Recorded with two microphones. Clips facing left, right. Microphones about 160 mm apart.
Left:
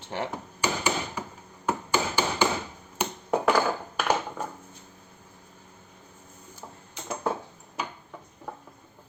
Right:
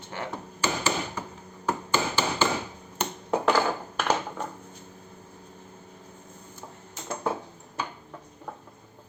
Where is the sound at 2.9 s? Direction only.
10° left (ahead or behind).